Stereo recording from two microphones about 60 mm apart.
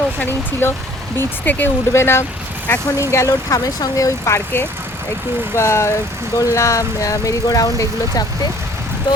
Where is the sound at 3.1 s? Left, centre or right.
Left.